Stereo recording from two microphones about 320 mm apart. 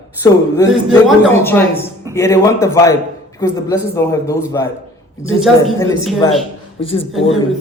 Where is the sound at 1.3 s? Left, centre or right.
Centre.